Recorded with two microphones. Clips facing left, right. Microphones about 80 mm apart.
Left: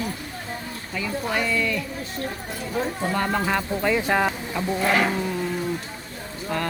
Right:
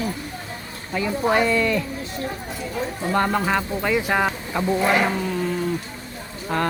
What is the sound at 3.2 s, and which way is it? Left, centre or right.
Speech, centre.